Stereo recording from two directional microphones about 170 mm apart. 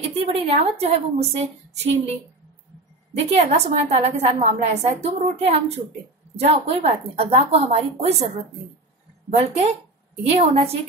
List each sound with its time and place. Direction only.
0.0 s a woman's voice: 35° right (ahead or behind)
3.2 s a woman's voice: 40° right (ahead or behind)
10.2 s a woman's voice: 35° right (ahead or behind)